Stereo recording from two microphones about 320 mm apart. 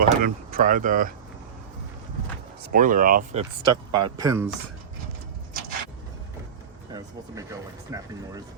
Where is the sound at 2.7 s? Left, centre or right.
Right.